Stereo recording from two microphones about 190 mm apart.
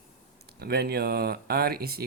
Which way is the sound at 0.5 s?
55° right (ahead or behind).